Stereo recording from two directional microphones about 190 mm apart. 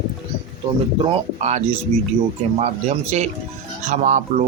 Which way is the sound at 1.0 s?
35° right (ahead or behind).